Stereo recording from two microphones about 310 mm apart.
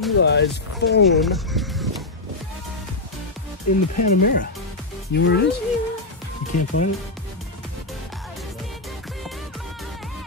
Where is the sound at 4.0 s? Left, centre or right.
Left.